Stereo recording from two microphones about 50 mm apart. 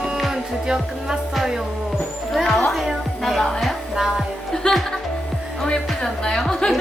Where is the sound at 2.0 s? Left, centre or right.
Centre.